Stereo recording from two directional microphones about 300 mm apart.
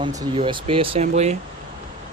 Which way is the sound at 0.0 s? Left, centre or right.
Centre.